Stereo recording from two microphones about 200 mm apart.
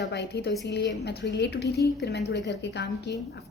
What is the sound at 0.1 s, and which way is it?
Speech, 60° left (ahead or behind).